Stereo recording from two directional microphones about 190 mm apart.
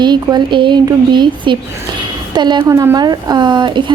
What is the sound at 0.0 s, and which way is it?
A woman's voice, 25° right (ahead or behind).